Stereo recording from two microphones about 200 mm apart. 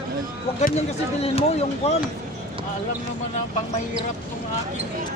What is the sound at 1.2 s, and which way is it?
Speech, 30° left (ahead or behind).